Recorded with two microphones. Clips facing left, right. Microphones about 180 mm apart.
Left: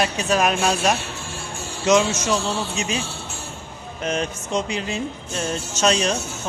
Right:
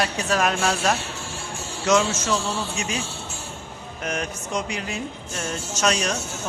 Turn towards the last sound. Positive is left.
turn(degrees=25)  # may be behind; listen again after turning